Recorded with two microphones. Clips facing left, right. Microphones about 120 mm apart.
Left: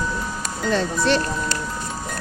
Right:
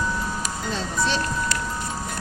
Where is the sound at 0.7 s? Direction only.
65° left (ahead or behind).